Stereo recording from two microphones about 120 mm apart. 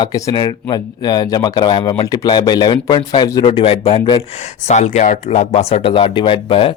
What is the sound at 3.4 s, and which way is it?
Speech, 50° left (ahead or behind).